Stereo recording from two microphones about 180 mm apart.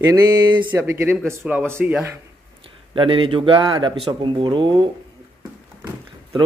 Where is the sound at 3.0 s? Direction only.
30° right (ahead or behind).